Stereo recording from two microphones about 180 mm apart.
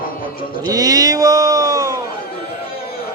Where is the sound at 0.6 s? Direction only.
20° right (ahead or behind).